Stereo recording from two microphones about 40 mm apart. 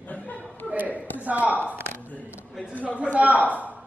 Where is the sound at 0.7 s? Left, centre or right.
Right.